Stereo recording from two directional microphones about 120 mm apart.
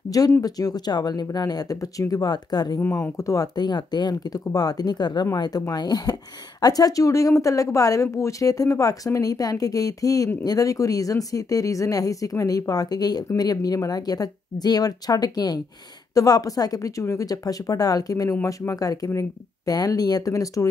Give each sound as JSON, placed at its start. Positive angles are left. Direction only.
{"t": 0.1, "sound": "speech", "side_deg": 30}